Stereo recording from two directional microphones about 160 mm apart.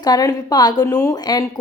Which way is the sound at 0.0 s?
25° left (ahead or behind).